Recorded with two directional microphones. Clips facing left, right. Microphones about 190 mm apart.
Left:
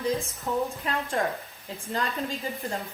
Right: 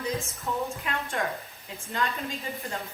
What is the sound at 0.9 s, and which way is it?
Speech, 35° left (ahead or behind).